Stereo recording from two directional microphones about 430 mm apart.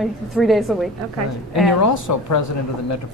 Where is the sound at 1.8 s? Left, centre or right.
Left.